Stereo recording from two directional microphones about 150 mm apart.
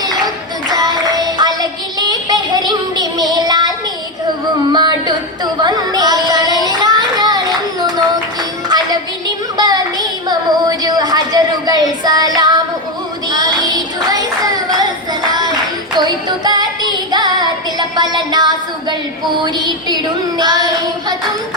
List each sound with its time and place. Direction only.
0.7 s music: 25° right (ahead or behind)
2.0 s child singing: 25° right (ahead or behind)
4.7 s music: 30° right (ahead or behind)
5.5 s child singing: 30° right (ahead or behind)
9.6 s a sound: 25° right (ahead or behind)
13.3 s child singing: 25° right (ahead or behind)
15.3 s clapping: 25° right (ahead or behind)
16.0 s music: 25° right (ahead or behind)
20.4 s child singing: 25° right (ahead or behind)